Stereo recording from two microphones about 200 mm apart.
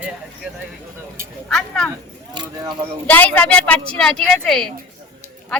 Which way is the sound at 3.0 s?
10° left (ahead or behind).